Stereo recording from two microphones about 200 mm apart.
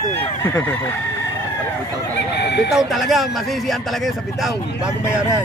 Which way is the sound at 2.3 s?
55° left (ahead or behind).